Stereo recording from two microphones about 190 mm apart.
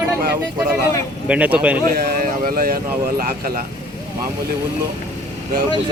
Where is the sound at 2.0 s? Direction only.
50° right (ahead or behind).